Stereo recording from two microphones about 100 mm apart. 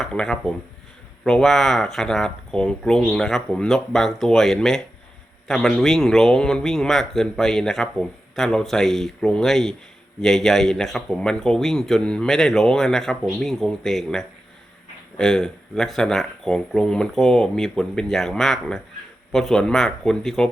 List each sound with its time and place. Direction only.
0.0 s speech: 5° left (ahead or behind)